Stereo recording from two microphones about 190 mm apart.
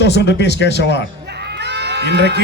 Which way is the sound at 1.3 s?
60° right (ahead or behind).